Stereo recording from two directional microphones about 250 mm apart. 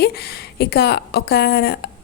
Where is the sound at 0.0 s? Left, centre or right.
Left.